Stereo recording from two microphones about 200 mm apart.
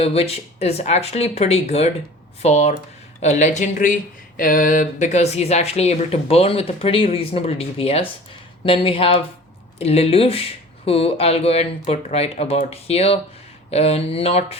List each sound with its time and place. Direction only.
0.0 s speech: 30° left (ahead or behind)